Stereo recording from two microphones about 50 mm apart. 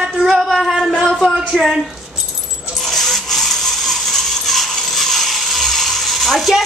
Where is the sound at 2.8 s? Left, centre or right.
Centre.